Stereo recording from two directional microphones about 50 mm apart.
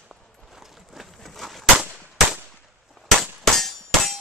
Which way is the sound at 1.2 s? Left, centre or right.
Centre.